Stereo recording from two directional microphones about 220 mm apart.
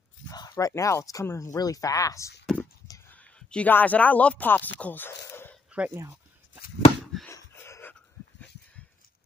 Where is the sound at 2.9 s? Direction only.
5° left (ahead or behind).